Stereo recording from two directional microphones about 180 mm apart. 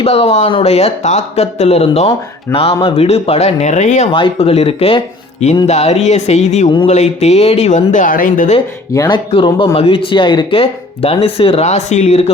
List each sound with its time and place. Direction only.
0.0 s speech: 35° left (ahead or behind)
4.1 s speech: 30° left (ahead or behind); by 8.5 s 50° left (ahead or behind)
8.9 s speech: 20° left (ahead or behind); by 12.3 s 35° left (ahead or behind)